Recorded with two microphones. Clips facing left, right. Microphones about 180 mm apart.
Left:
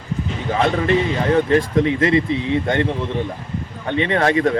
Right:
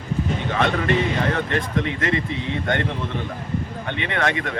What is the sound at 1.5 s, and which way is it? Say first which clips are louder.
Speech: left 7 dB; 30° left (ahead or behind).